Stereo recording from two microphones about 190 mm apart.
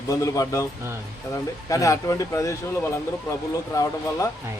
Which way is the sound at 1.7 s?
15° left (ahead or behind).